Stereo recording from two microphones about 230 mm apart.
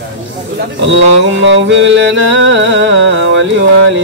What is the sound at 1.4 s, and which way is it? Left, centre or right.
Music, right.